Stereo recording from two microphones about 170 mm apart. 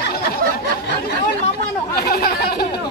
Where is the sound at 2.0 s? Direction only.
65° left (ahead or behind).